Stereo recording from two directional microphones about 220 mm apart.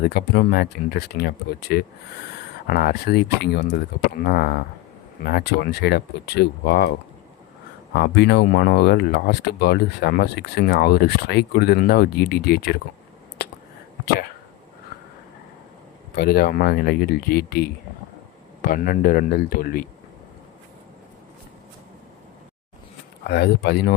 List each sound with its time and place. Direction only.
0.0 s speech: 50° left (ahead or behind)
7.9 s speech: 50° left (ahead or behind)
13.4 s a sound: 50° left (ahead or behind)
16.1 s speech: 45° left (ahead or behind)
23.2 s speech: 45° left (ahead or behind)